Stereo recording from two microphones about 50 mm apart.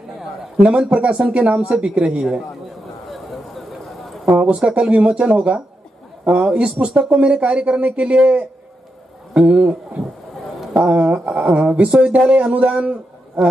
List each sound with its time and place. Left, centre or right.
0.6 s speech: right
3.1 s a sound: centre
4.4 s a man's voice: right